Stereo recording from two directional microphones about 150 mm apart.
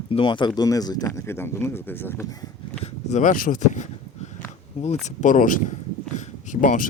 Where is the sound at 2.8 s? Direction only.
55° left (ahead or behind).